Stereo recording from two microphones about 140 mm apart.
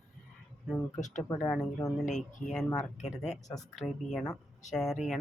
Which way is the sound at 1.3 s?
15° left (ahead or behind).